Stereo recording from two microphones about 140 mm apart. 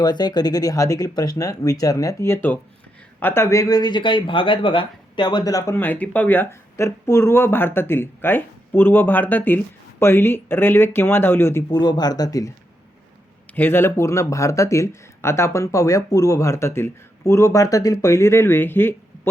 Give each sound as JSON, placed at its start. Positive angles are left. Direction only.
{"t": 0.0, "sound": "speech", "side_deg": 30}
{"t": 11.7, "sound": "speech", "side_deg": 30}
{"t": 13.5, "sound": "speech", "side_deg": 15}